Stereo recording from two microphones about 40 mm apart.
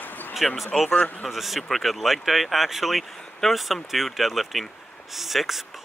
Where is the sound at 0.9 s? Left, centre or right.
Left.